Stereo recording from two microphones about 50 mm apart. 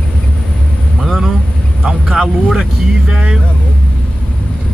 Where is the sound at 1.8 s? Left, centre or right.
Centre.